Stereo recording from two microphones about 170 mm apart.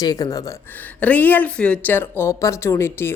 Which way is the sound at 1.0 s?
10° left (ahead or behind).